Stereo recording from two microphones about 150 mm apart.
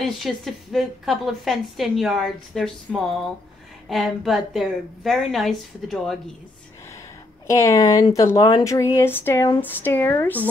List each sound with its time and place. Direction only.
0.0 s a woman's voice: centre (ahead or behind)
3.9 s a woman's voice: centre (ahead or behind)
7.4 s speech: 20° left (ahead or behind)